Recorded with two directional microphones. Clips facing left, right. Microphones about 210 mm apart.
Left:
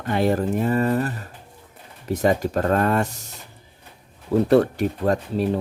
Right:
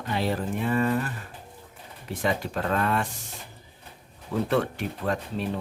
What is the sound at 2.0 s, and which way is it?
Speech, 40° left (ahead or behind).